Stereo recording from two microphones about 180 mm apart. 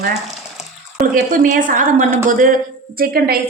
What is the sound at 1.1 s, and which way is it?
A woman's voice, 45° right (ahead or behind).